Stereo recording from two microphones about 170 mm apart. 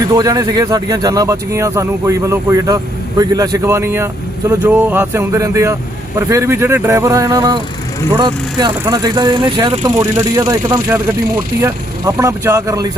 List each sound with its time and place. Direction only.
0.0 s speech: 20° right (ahead or behind)
10.0 s speech: 15° right (ahead or behind)